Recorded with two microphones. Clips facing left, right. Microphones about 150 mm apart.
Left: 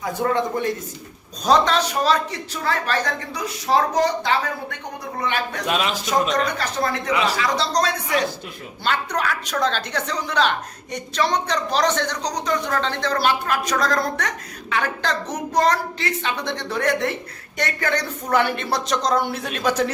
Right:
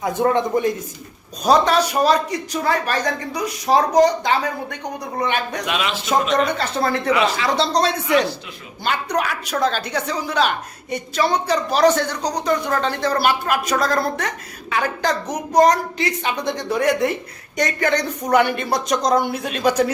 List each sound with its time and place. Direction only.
0.0 s speech: 20° right (ahead or behind)
5.6 s speech: 40° left (ahead or behind)
6.1 s speech: 25° right (ahead or behind)
9.1 s speech: 10° right (ahead or behind)